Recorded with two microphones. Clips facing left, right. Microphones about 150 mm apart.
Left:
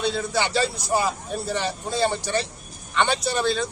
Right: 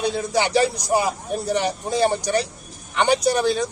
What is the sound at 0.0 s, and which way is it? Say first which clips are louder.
A man's voice: right 3 dB; 15° right (ahead or behind).